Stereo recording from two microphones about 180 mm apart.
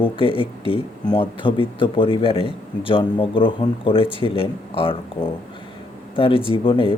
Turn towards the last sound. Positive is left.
turn(degrees=30)  # may be behind; listen again after turning